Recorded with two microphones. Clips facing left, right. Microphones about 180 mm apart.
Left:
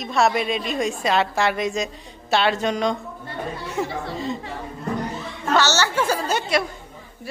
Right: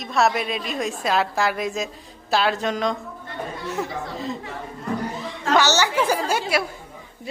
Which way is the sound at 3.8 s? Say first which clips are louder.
Left 4 dB; centre (ahead or behind).